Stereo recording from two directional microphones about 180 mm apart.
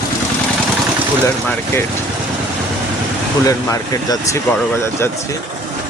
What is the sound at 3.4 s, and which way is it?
A man's voice, 20° left (ahead or behind).